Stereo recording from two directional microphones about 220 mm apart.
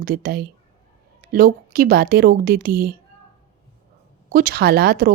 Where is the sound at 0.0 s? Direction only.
40° right (ahead or behind).